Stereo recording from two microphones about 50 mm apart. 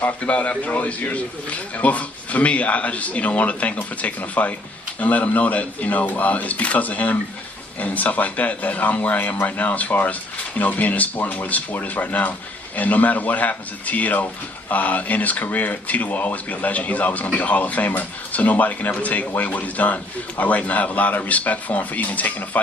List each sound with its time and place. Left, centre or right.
0.0 s a man's voice: left